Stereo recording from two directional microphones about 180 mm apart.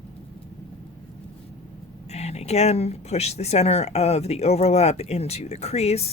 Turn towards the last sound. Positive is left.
turn(degrees=35)  # may be behind; listen again after turning